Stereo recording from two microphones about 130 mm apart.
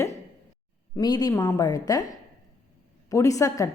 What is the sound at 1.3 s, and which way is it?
Speech, 20° left (ahead or behind).